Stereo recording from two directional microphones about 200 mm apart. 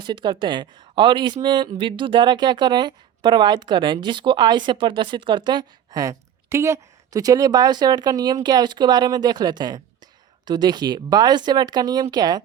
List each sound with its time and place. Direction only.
0.0 s speech: 25° right (ahead or behind)